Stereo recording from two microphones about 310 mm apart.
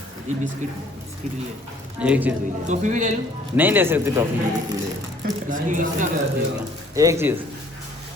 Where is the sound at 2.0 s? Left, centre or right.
Centre.